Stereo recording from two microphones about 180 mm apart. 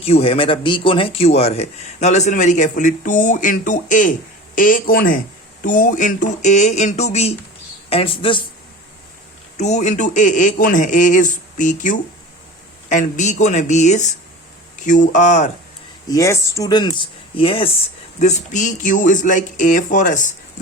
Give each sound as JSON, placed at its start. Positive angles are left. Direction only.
{"t": 0.0, "sound": "a man's voice", "side_deg": 30}
{"t": 9.6, "sound": "a man's voice", "side_deg": 40}
{"t": 16.0, "sound": "a man's voice", "side_deg": 20}